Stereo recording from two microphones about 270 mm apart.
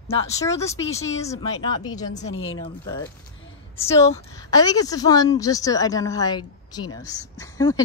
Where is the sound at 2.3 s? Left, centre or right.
Left.